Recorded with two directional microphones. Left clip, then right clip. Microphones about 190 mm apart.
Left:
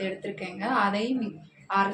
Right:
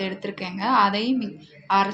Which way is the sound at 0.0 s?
55° right (ahead or behind).